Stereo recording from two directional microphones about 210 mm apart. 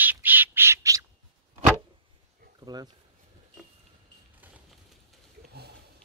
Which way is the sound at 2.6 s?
20° right (ahead or behind).